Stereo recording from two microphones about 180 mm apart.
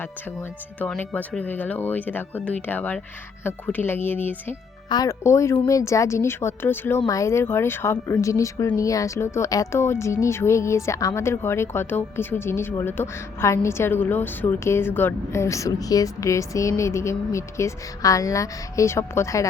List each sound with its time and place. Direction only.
0.8 s speech: 10° left (ahead or behind)